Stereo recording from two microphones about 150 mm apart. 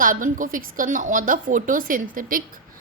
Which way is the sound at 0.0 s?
65° right (ahead or behind).